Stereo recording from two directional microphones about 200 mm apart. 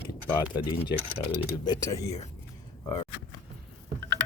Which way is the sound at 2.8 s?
25° left (ahead or behind).